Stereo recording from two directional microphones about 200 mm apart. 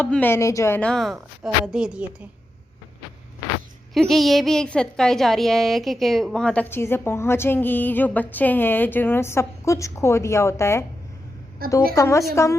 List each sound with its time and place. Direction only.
0.0 s a woman's voice: 10° left (ahead or behind)
3.9 s a woman's voice: centre (ahead or behind)
11.6 s a woman's voice: 50° right (ahead or behind)
11.9 s a woman's voice: 15° left (ahead or behind)